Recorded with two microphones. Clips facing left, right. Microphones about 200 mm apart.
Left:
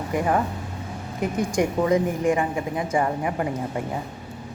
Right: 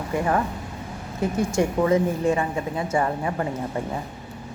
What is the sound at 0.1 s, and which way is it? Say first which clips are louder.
A woman's voice: even; 20° left (ahead or behind).